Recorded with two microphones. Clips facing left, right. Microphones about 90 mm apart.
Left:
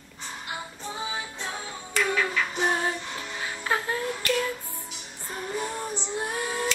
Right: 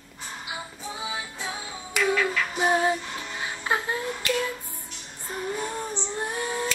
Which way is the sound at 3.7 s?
15° right (ahead or behind).